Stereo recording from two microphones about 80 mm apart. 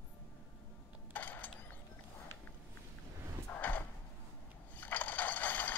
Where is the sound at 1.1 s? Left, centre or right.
Left.